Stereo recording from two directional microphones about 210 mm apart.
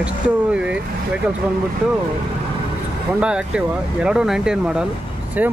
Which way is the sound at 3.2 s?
5° right (ahead or behind).